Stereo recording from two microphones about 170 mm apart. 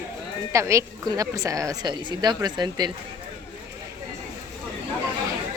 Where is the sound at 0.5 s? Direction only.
15° right (ahead or behind).